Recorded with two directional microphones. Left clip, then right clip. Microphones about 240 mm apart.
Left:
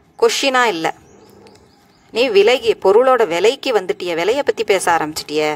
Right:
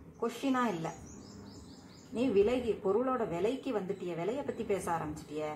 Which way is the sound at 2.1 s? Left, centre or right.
Left.